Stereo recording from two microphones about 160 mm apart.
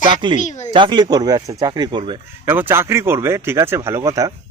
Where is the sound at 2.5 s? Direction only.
15° right (ahead or behind).